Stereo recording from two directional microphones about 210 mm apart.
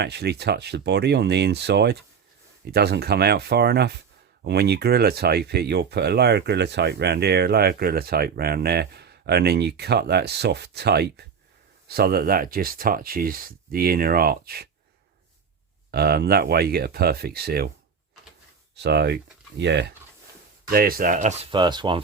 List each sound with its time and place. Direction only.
0.0 s speech: 50° right (ahead or behind)
15.9 s speech: 50° right (ahead or behind)
18.8 s speech: 50° right (ahead or behind)
20.7 s speech: 45° right (ahead or behind)
21.5 s speech: 20° right (ahead or behind)